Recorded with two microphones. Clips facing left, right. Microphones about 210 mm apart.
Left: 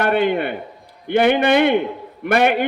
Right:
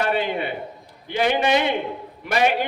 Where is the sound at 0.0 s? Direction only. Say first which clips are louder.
Left 5 dB; 55° left (ahead or behind).